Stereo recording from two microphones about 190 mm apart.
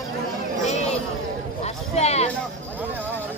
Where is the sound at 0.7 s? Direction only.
35° left (ahead or behind).